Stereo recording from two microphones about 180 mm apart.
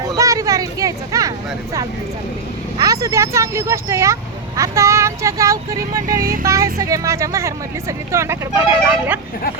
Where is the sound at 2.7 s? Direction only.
20° right (ahead or behind).